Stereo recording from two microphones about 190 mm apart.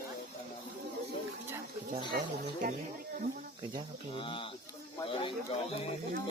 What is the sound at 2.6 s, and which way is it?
Speech, 55° right (ahead or behind).